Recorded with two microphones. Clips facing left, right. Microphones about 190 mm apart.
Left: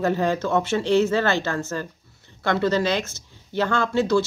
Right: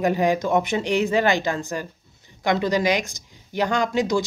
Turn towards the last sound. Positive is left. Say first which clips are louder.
# left 1 dB
turn(degrees=-15)  # may be behind; listen again after turning